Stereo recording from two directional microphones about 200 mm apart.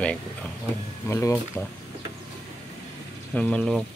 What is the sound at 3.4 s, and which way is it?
Speech, 5° left (ahead or behind).